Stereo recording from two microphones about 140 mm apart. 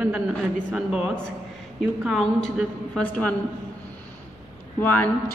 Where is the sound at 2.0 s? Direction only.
Centre (ahead or behind).